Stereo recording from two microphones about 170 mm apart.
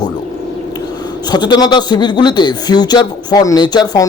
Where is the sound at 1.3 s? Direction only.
25° left (ahead or behind).